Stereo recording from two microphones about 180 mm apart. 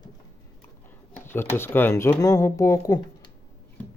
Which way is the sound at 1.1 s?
10° left (ahead or behind).